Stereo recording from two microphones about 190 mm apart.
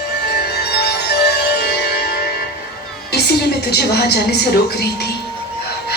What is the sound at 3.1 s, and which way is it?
A woman's voice, 60° left (ahead or behind).